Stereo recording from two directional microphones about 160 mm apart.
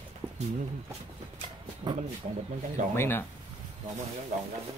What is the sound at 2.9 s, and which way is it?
Speech, 15° left (ahead or behind).